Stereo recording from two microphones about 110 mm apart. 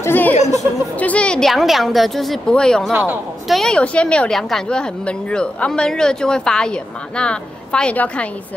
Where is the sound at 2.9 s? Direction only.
15° right (ahead or behind).